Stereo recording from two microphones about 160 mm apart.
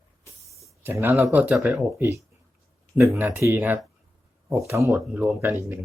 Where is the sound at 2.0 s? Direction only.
20° right (ahead or behind).